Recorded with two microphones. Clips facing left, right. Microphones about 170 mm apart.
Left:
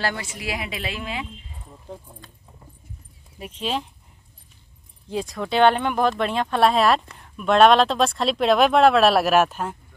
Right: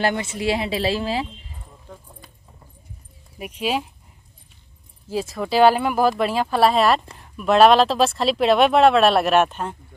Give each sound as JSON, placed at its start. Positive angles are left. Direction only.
{"t": 0.0, "sound": "a woman's voice", "side_deg": -25}
{"t": 3.3, "sound": "speech", "side_deg": -10}
{"t": 5.0, "sound": "speech", "side_deg": -5}